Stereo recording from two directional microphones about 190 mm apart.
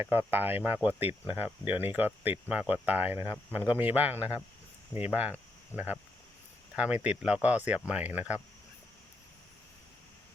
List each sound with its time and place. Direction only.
0.0 s speech: 10° right (ahead or behind)